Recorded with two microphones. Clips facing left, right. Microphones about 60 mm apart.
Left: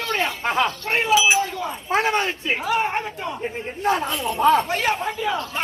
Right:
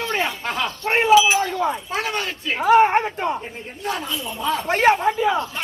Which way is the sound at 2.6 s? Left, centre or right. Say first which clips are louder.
Right 11 dB; right.